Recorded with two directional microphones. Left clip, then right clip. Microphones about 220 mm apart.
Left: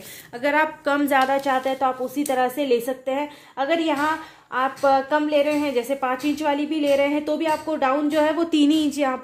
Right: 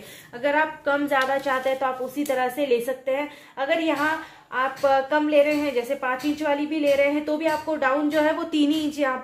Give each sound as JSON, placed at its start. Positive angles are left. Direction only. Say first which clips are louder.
{"t": 0.4, "sound": "a woman's voice", "louder": "left 2 dB", "side_deg": 55}